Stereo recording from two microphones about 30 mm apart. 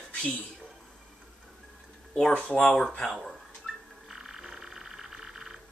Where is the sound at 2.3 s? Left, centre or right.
Left.